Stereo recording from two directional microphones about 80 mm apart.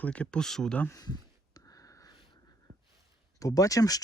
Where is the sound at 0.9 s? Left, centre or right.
Left.